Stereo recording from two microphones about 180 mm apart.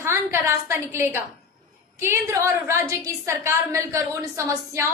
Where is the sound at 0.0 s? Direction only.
15° right (ahead or behind).